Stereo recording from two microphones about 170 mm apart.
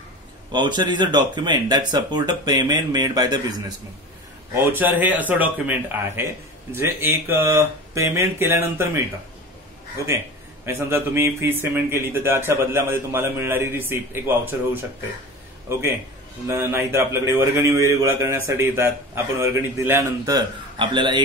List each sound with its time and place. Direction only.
0.5 s speech: 25° right (ahead or behind)
4.6 s a man's voice: 10° right (ahead or behind)
10.6 s a man's voice: 15° right (ahead or behind)
16.4 s a man's voice: 15° right (ahead or behind)